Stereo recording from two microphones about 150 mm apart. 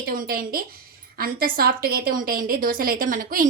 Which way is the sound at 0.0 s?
80° right.